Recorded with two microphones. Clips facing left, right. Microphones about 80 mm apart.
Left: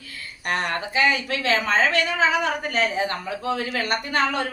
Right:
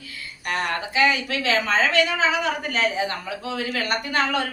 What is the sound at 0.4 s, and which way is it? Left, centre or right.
A woman's voice, left.